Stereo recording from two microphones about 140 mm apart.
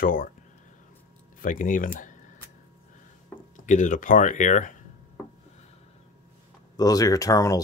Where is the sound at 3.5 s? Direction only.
60° left (ahead or behind).